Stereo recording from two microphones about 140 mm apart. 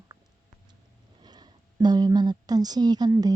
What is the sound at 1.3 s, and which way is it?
A woman's voice, 30° right (ahead or behind).